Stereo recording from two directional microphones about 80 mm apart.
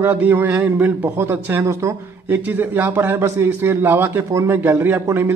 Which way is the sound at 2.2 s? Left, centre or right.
Right.